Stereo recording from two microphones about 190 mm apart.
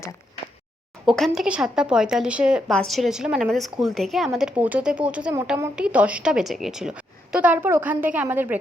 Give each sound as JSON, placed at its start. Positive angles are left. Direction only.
{"t": 1.0, "sound": "a woman's voice", "side_deg": 0}